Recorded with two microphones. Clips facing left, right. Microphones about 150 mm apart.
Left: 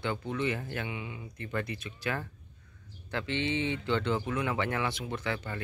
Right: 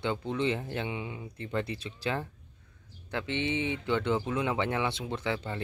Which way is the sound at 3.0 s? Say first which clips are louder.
Even; 20° right (ahead or behind).